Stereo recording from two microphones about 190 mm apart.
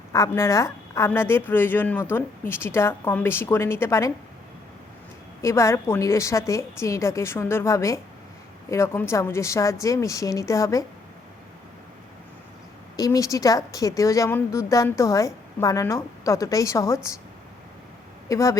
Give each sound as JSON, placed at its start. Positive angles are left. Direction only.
{"t": 0.1, "sound": "a woman's voice", "side_deg": 15}
{"t": 5.4, "sound": "a woman's voice", "side_deg": 15}
{"t": 13.0, "sound": "a woman's voice", "side_deg": 15}
{"t": 18.3, "sound": "a woman's voice", "side_deg": 15}